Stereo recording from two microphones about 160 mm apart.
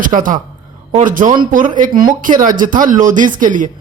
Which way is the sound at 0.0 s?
60° right (ahead or behind).